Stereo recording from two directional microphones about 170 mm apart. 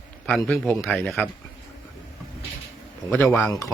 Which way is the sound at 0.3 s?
5° left (ahead or behind).